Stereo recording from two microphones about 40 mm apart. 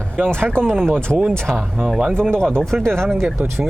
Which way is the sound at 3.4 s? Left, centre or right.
Right.